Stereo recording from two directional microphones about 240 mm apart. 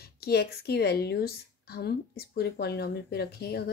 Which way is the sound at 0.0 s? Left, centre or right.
Left.